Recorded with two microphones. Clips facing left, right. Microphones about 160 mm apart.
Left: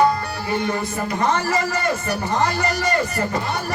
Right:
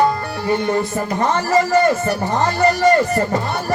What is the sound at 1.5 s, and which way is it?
Speech, 45° right (ahead or behind).